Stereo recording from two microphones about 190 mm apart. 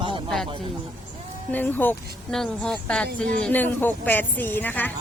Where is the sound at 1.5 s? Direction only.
10° left (ahead or behind).